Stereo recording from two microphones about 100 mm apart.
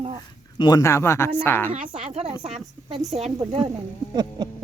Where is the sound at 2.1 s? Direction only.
90° right.